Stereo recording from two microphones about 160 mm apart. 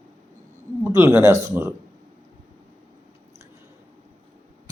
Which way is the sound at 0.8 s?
15° right (ahead or behind).